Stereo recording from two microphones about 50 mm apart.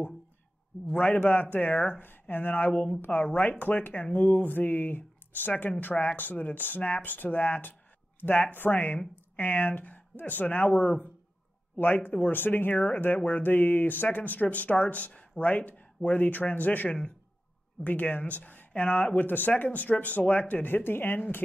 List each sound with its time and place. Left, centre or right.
0.8 s a man's voice: left
2.6 s a man's voice: left
4.1 s speech: centre
4.4 s speech: left
10.7 s speech: centre
11.7 s speech: left
12.3 s speech: left
12.7 s a man's voice: centre
13.4 s speech: left